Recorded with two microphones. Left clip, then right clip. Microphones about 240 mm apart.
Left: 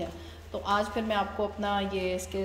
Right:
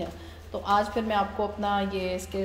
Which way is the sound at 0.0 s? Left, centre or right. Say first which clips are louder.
Right 1 dB; centre.